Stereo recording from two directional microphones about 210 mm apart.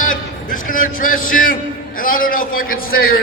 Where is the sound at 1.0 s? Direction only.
40° left (ahead or behind).